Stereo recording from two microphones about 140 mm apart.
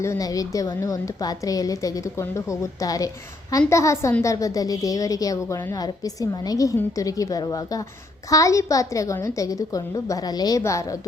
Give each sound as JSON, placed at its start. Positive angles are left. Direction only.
{"t": 0.0, "sound": "a woman's voice", "side_deg": 25}